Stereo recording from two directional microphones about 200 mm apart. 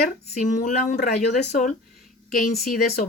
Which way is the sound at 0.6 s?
45° left (ahead or behind).